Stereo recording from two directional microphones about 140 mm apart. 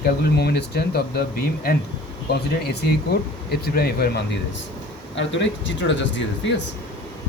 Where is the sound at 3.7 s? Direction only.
90° left.